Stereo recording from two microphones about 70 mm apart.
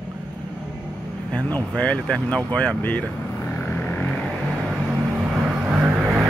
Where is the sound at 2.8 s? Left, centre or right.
Left.